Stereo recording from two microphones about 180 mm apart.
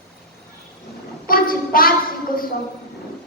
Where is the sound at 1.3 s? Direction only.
55° left (ahead or behind).